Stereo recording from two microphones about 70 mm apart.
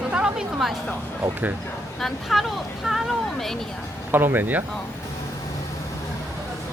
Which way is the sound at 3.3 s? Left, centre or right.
Centre.